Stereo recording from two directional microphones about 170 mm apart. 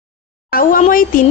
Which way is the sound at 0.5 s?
55° left (ahead or behind).